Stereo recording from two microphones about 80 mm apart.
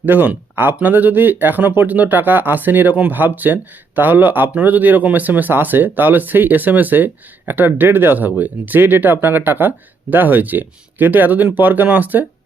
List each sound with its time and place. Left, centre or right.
0.0 s speech: right